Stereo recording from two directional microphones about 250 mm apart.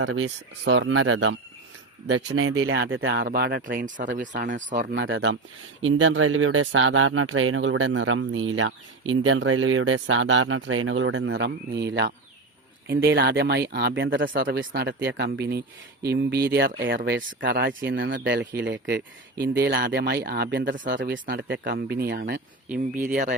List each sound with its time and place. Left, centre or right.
0.0 s speech: right
4.9 s speech: right